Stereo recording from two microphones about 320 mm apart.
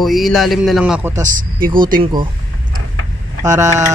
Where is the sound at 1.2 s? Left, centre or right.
Right.